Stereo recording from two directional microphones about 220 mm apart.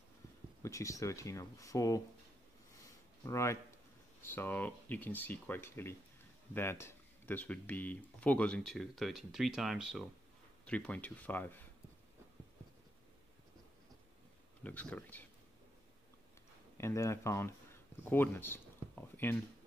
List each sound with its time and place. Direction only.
0.6 s speech: 15° left (ahead or behind)
3.3 s speech: 15° left (ahead or behind)
14.6 s speech: 5° left (ahead or behind)
16.7 s speech: 10° left (ahead or behind)